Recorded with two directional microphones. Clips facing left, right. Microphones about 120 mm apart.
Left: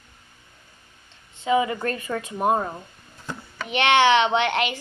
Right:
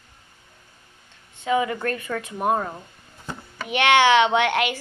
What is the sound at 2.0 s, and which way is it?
Speech, 25° left (ahead or behind).